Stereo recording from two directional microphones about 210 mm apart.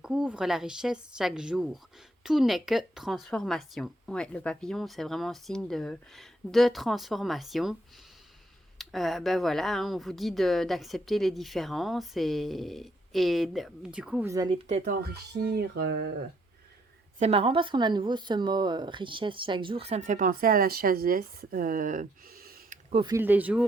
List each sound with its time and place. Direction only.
0.0 s speech: 5° right (ahead or behind)
8.8 s speech: centre (ahead or behind)
14.3 s speech: 20° right (ahead or behind)
14.7 s speech: 40° right (ahead or behind)
17.2 s speech: 30° right (ahead or behind); by 22.8 s 45° right (ahead or behind)
22.9 s speech: 25° right (ahead or behind)
23.1 s speech: 10° right (ahead or behind)